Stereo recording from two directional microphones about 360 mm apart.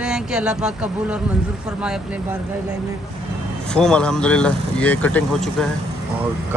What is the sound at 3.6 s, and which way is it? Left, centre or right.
Speech, centre.